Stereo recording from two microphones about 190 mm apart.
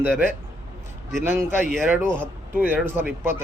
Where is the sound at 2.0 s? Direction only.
5° left (ahead or behind).